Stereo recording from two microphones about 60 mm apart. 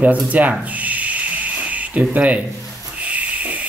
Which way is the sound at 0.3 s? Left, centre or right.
Right.